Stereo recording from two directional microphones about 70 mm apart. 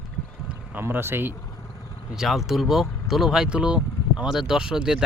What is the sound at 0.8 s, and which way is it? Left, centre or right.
Speech, right.